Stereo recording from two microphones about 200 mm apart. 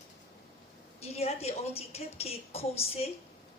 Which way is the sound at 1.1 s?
30° left (ahead or behind).